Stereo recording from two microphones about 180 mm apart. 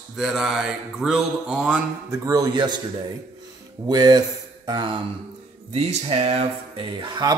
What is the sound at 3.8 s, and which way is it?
Speech, 20° right (ahead or behind).